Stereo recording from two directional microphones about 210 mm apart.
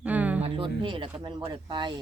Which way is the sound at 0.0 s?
5° right (ahead or behind).